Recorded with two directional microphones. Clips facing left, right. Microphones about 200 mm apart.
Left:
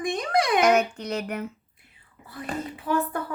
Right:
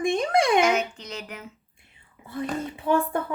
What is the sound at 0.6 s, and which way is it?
Speech, 60° left (ahead or behind).